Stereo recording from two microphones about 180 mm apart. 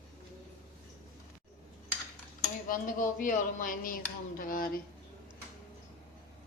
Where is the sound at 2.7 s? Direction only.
50° left (ahead or behind).